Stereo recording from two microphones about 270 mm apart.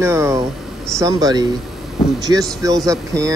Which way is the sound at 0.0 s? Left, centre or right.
Centre.